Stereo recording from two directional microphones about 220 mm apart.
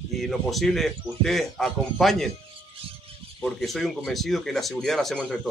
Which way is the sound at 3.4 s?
Centre (ahead or behind).